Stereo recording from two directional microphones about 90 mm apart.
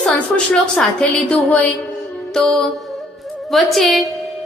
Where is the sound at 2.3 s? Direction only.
5° left (ahead or behind).